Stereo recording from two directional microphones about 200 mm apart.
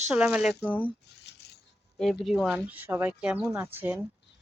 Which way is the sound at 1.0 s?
55° left (ahead or behind).